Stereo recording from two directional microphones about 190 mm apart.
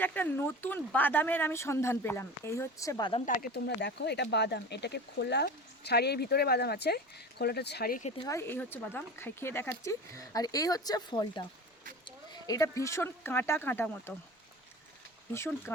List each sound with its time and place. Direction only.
0.0 s speech: 10° left (ahead or behind)
3.2 s speech: 55° left (ahead or behind)
8.2 s speech: 15° left (ahead or behind)
15.3 s speech: 10° left (ahead or behind)